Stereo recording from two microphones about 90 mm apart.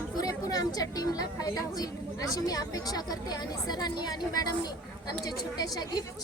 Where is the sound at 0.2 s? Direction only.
45° left (ahead or behind).